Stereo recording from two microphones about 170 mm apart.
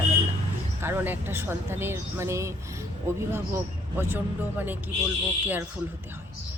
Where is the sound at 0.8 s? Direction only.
15° right (ahead or behind).